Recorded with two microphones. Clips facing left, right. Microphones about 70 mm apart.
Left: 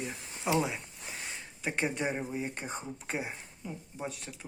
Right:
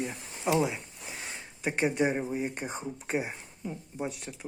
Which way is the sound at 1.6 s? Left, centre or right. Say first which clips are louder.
Right 5 dB; centre.